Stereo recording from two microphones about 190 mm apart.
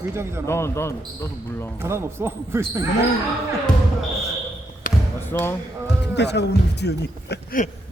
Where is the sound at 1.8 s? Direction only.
15° right (ahead or behind).